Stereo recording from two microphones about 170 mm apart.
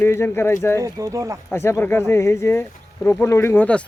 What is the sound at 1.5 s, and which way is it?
Speech, 15° left (ahead or behind).